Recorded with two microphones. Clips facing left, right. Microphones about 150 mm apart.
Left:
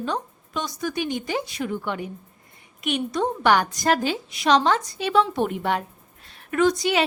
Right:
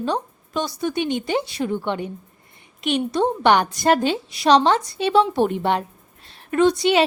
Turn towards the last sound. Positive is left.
turn(degrees=-30)  # may be behind; listen again after turning